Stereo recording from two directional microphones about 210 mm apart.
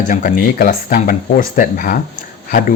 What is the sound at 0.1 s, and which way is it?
Speech, 40° left (ahead or behind).